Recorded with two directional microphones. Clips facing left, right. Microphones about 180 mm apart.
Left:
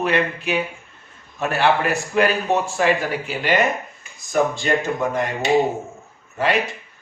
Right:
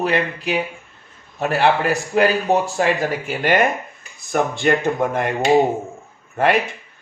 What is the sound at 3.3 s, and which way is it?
Speech, 50° right (ahead or behind).